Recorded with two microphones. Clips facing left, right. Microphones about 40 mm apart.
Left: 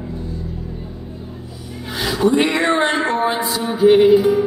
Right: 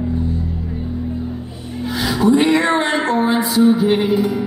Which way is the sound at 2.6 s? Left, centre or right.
Centre.